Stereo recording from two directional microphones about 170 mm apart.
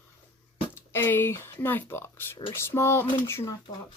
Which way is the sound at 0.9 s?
15° left (ahead or behind).